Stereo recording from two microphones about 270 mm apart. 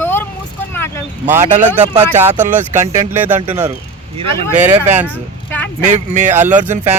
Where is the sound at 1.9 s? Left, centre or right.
Right.